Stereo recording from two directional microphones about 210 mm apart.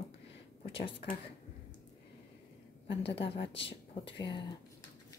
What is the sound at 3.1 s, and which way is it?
Speech, 25° left (ahead or behind).